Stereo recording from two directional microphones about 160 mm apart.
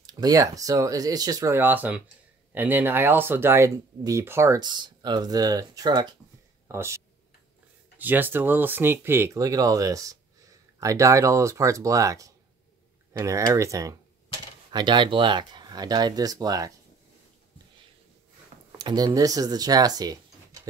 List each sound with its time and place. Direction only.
0.0 s speech: 25° right (ahead or behind)
8.0 s speech: 10° right (ahead or behind)
18.8 s speech: 25° right (ahead or behind)